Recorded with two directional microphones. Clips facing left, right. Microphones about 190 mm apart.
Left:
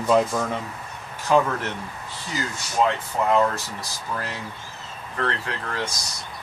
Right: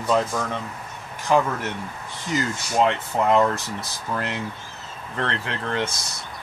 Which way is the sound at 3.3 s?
20° right (ahead or behind).